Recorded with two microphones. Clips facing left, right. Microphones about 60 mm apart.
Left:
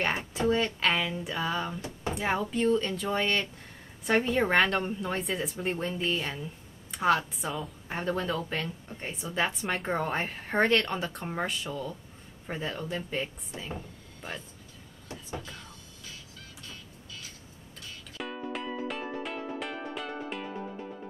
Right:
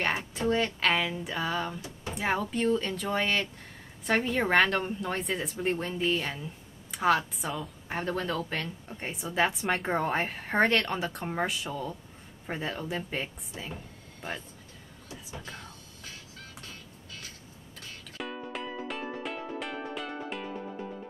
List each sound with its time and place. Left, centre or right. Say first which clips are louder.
0.0 s a woman's voice: left 1 dB; centre
15.4 s a sound: right 2 dB; right
18.1 s music: left 1 dB; centre